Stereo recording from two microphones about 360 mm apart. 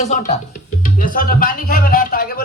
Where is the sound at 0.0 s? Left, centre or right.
Centre.